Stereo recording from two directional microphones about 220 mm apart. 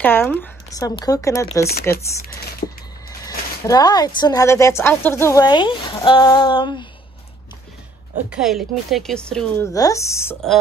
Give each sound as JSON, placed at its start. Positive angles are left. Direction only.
{"t": 0.0, "sound": "speech", "side_deg": 10}
{"t": 3.1, "sound": "speech", "side_deg": 15}
{"t": 8.3, "sound": "a woman's voice", "side_deg": 0}
{"t": 9.7, "sound": "speech", "side_deg": 15}